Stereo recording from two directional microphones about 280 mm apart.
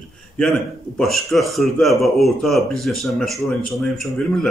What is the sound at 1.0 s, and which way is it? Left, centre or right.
Speech, centre.